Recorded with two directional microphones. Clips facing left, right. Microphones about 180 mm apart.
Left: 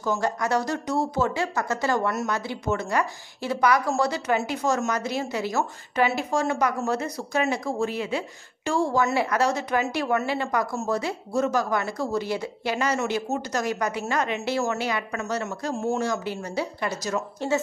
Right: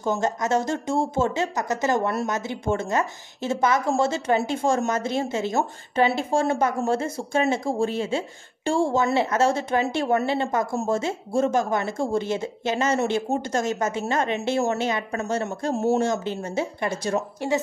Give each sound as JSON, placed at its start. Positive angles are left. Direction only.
{"t": 0.0, "sound": "speech", "side_deg": -20}
{"t": 16.0, "sound": "speech", "side_deg": -25}
{"t": 17.4, "sound": "speech", "side_deg": -15}